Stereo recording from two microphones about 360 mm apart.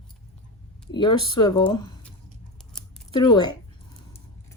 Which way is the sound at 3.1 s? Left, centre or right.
Centre.